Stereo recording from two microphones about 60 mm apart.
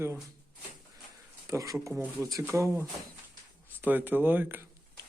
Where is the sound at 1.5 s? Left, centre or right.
Right.